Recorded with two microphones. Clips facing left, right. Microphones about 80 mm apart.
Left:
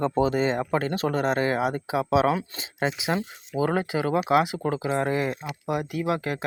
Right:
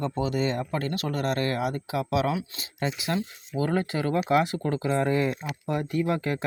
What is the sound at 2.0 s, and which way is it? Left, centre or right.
Speech, left.